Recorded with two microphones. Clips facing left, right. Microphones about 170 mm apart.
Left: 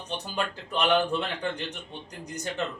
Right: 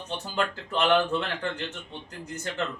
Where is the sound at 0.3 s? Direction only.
15° left (ahead or behind).